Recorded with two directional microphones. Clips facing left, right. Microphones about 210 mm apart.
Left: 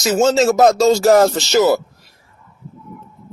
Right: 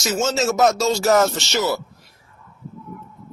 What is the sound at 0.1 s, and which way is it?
Speech, 35° left (ahead or behind).